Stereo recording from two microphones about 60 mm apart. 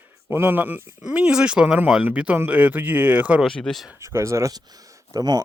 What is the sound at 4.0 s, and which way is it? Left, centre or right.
Speech, right.